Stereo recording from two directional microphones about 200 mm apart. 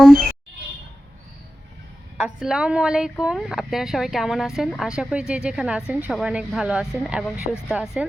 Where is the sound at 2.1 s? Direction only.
5° right (ahead or behind).